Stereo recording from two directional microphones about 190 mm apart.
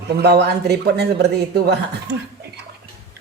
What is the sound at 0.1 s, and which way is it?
Speech, 60° right (ahead or behind).